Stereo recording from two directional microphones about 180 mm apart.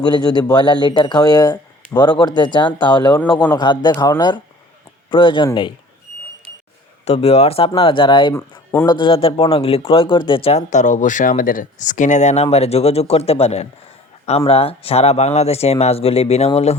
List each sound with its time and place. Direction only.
0.0 s speech: 25° left (ahead or behind)
7.0 s speech: 35° left (ahead or behind)
8.3 s speech: 15° left (ahead or behind)
8.9 s speech: 25° left (ahead or behind)